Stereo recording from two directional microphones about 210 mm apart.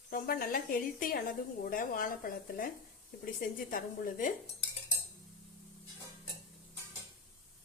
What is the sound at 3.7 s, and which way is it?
Speech, 40° left (ahead or behind).